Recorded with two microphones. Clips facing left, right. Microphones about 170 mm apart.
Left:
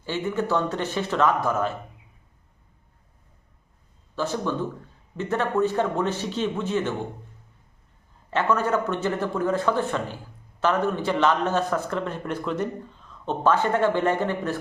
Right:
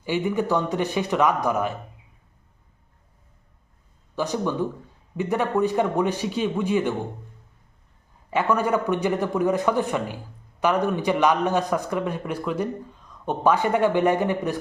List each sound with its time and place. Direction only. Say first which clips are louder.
0.0 s a man's voice: right 3 dB; 15° right (ahead or behind)
4.1 s a man's voice: right 1 dB; 15° right (ahead or behind)
8.3 s a man's voice: right 1 dB; 10° right (ahead or behind)